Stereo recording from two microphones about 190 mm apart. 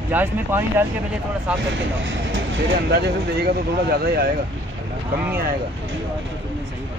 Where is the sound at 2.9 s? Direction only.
55° right (ahead or behind).